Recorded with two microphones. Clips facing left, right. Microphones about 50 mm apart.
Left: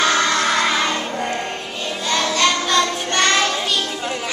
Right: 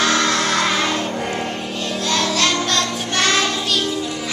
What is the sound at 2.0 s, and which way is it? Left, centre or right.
Child singing, centre.